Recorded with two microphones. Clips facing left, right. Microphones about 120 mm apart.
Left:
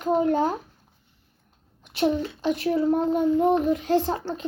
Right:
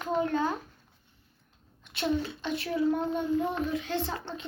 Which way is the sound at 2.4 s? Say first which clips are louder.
Left 6 dB; 40° left (ahead or behind).